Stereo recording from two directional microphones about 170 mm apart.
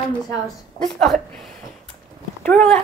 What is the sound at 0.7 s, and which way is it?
A woman's voice, centre (ahead or behind).